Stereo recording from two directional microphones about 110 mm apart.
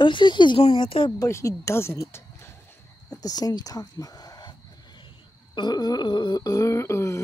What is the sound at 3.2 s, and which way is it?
Speech, 35° left (ahead or behind).